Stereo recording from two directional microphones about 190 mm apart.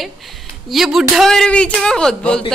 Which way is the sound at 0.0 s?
Centre (ahead or behind).